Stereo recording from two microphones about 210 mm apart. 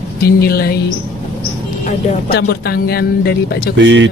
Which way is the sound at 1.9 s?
50° left (ahead or behind).